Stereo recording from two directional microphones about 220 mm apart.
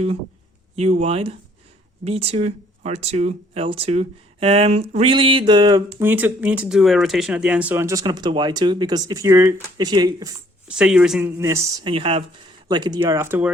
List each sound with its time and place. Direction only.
0.8 s speech: 30° right (ahead or behind)
10.7 s speech: 5° right (ahead or behind)